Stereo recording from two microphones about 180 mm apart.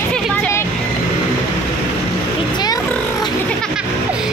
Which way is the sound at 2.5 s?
25° left (ahead or behind).